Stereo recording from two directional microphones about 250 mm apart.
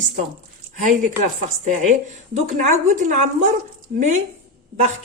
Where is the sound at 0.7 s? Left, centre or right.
Right.